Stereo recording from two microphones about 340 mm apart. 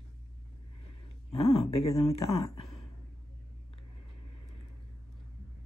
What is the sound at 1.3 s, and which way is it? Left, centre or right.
Speech, centre.